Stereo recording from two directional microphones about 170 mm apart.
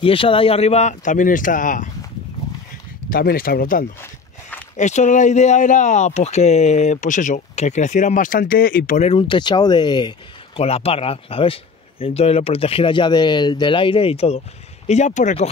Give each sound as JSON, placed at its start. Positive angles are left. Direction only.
{"t": 0.0, "sound": "speech", "side_deg": 30}
{"t": 3.1, "sound": "speech", "side_deg": 60}
{"t": 4.0, "sound": "walk", "side_deg": 10}
{"t": 4.7, "sound": "speech", "side_deg": 45}
{"t": 9.3, "sound": "speech", "side_deg": 25}